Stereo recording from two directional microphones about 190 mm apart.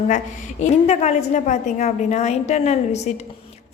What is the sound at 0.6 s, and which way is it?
A woman's voice, 35° left (ahead or behind).